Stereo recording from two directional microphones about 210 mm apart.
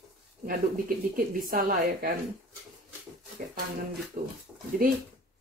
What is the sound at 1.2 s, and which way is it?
Speech, 40° right (ahead or behind).